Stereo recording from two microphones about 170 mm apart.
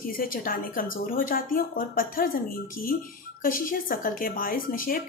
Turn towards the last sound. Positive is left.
turn(degrees=55)  # may be behind; listen again after turning